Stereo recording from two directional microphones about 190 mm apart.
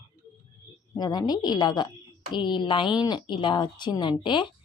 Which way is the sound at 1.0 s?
20° left (ahead or behind).